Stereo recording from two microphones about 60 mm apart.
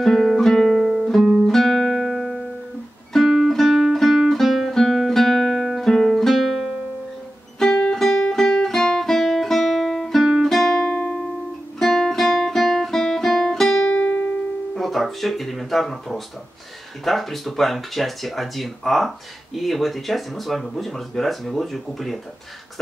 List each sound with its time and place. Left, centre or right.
0.0 s music: centre
1.2 s music: centre
1.5 s music: centre
7.9 s music: centre
10.9 s music: centre
11.8 s guitar: centre
13.9 s music: left
14.8 s music: centre
17.0 s speech: centre